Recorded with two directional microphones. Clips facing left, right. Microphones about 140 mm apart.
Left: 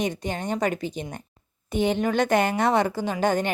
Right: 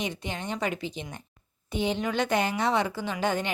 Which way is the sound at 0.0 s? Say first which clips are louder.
Left 5 dB; 45° left (ahead or behind).